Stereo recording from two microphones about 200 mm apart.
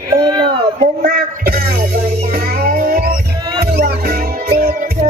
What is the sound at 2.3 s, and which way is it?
Music, 45° right (ahead or behind).